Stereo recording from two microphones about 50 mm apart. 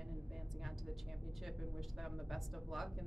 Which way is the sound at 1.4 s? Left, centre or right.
Centre.